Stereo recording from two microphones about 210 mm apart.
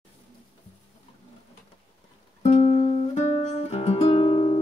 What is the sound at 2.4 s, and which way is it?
Music, 30° left (ahead or behind).